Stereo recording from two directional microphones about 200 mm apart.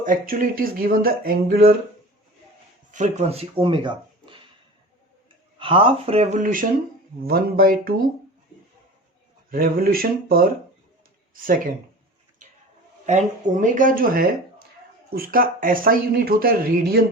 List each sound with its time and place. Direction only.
0.0 s speech: 45° right (ahead or behind)
2.9 s speech: 35° right (ahead or behind)
5.5 s speech: 25° right (ahead or behind); by 7.9 s 50° right (ahead or behind)
9.5 s speech: 45° right (ahead or behind)
12.4 s a sound: 40° right (ahead or behind)
13.1 s speech: 35° right (ahead or behind)